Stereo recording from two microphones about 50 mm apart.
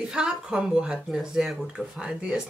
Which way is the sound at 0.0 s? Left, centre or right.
Centre.